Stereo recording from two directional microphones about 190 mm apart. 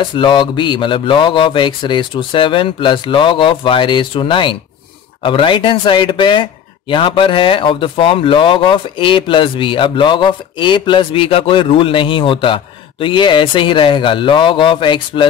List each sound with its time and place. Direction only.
0.0 s speech: 25° left (ahead or behind)